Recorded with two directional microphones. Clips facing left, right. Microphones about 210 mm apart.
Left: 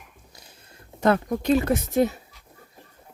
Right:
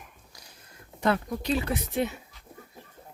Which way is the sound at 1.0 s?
50° left (ahead or behind).